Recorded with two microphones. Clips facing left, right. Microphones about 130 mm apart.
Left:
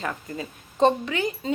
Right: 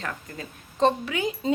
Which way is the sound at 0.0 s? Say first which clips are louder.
Left 4 dB; 5° left (ahead or behind).